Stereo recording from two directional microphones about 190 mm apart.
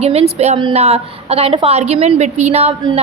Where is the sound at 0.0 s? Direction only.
35° right (ahead or behind).